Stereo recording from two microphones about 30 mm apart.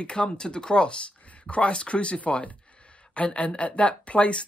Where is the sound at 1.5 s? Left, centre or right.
Left.